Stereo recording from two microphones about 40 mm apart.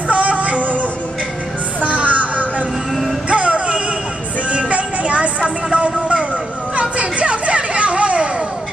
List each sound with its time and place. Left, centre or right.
0.1 s music: right
1.9 s music: right
6.7 s a sound: right